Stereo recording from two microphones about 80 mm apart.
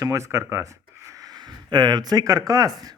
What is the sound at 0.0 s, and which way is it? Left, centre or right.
Speech, right.